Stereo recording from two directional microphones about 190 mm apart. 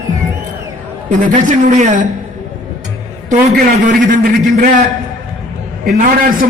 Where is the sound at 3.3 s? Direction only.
45° right (ahead or behind).